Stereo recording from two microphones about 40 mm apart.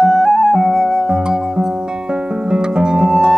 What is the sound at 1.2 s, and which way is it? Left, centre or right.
Music, centre.